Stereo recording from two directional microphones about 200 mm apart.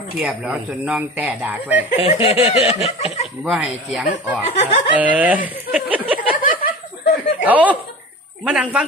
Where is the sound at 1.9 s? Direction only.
30° left (ahead or behind).